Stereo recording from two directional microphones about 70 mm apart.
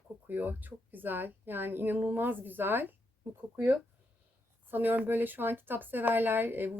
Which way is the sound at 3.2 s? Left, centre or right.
Right.